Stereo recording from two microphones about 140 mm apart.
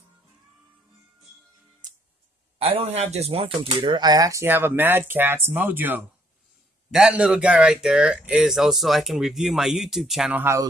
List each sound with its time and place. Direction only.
2.6 s speech: 45° right (ahead or behind); by 10.3 s centre (ahead or behind)
10.3 s speech: 20° right (ahead or behind)